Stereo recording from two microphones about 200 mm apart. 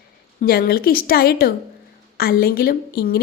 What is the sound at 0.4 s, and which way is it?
A woman's voice, 50° left (ahead or behind).